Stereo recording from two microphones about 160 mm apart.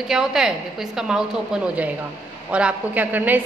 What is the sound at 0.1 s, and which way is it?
A woman's voice, 5° right (ahead or behind).